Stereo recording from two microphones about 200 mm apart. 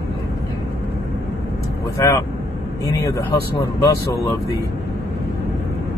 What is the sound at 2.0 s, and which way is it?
Speech, 15° left (ahead or behind).